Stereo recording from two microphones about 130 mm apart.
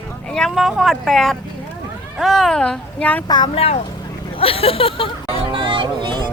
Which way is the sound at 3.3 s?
35° left (ahead or behind).